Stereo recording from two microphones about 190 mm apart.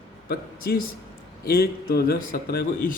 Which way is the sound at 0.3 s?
55° left (ahead or behind).